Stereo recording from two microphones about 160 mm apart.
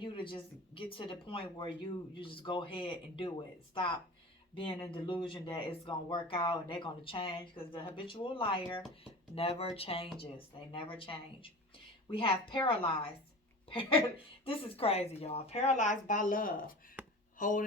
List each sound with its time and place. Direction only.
0.0 s speech: 30° left (ahead or behind)
4.5 s speech: 35° left (ahead or behind); by 16.7 s 60° left (ahead or behind)
17.0 s a sound: 10° right (ahead or behind)
17.3 s speech: 55° left (ahead or behind)